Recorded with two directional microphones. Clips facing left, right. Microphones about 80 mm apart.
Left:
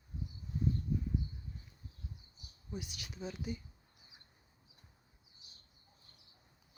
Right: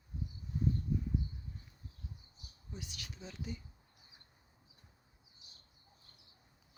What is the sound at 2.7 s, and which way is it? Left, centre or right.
Speech, centre.